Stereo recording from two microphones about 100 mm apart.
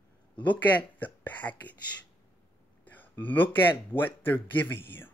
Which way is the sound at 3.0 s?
20° left (ahead or behind).